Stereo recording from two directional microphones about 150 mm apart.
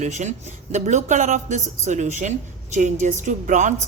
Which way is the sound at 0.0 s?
50° right (ahead or behind).